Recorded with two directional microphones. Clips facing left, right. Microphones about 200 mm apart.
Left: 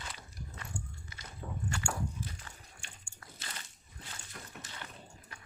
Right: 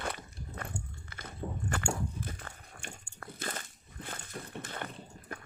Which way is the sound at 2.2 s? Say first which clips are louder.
Right 3 dB; 55° right (ahead or behind).